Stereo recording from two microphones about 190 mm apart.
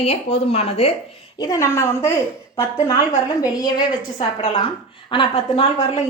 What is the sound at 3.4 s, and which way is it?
A woman's voice, 20° left (ahead or behind).